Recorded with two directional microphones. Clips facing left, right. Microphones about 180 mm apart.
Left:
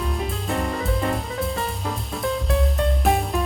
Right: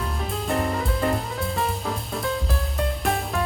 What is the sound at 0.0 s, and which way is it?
Music, centre (ahead or behind).